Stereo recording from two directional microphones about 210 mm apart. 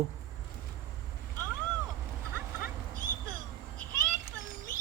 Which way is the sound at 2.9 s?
40° right (ahead or behind).